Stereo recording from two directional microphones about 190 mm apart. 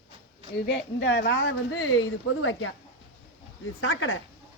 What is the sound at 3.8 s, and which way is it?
Speech, 90° left.